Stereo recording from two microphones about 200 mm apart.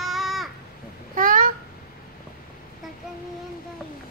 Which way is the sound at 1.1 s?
45° right (ahead or behind).